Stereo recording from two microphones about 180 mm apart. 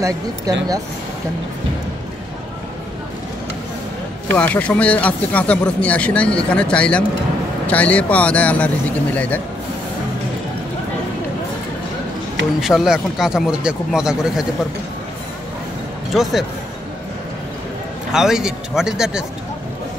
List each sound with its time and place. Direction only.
0.5 s speech: 20° right (ahead or behind)
4.3 s speech: 10° left (ahead or behind)
12.5 s speech: centre (ahead or behind)
16.1 s speech: centre (ahead or behind)
18.1 s speech: 5° right (ahead or behind)